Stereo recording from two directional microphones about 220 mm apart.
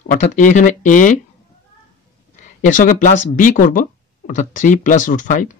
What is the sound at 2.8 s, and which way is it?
Speech, 35° left (ahead or behind).